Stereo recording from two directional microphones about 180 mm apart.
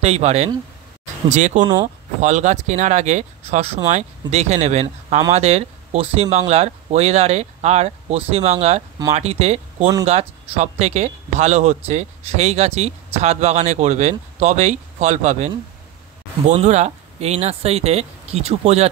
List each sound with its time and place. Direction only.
0.0 s speech: 40° right (ahead or behind)